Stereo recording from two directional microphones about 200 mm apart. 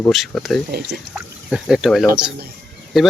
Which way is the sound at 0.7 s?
55° right (ahead or behind).